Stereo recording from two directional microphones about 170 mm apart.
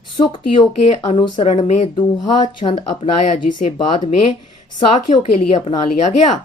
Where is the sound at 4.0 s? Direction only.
45° left (ahead or behind).